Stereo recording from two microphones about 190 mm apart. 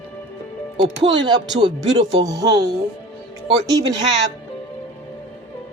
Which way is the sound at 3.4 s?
30° right (ahead or behind).